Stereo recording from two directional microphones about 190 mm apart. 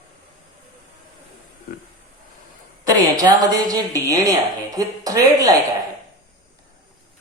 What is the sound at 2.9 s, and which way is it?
A woman's voice, 20° right (ahead or behind).